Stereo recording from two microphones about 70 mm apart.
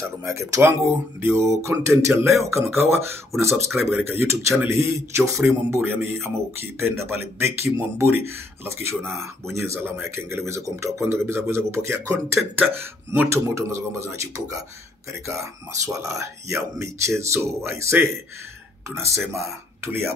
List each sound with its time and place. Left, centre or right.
0.2 s speech: right
9.8 s speech: right
12.5 s speech: right
13.3 s speech: right
15.8 s speech: right